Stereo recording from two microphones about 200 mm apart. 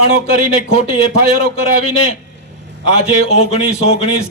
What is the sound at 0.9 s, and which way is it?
A man's voice, 30° left (ahead or behind).